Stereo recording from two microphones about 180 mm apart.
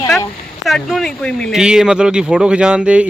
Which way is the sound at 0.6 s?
Centre (ahead or behind).